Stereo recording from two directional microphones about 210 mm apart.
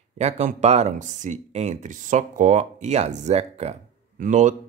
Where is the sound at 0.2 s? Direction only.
30° right (ahead or behind).